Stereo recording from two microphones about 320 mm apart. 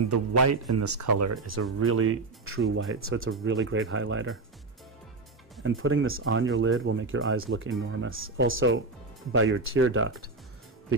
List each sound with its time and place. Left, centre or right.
0.1 s speech: right
5.6 s speech: right